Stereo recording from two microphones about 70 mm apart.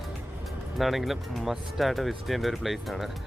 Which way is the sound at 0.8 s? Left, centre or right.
Centre.